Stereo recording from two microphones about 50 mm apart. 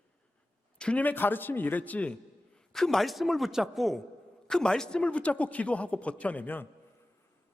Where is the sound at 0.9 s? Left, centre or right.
Left.